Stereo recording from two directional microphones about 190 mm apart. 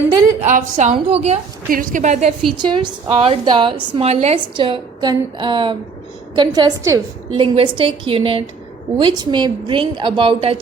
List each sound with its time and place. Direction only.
0.4 s a woman's voice: 40° right (ahead or behind)
1.7 s a woman's voice: 45° right (ahead or behind)
2.6 s a woman's voice: 25° right (ahead or behind)